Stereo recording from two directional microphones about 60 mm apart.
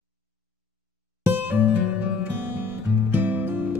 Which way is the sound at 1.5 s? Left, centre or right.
Right.